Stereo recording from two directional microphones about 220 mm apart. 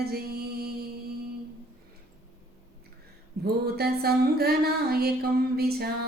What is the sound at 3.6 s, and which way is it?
Music, 45° right (ahead or behind).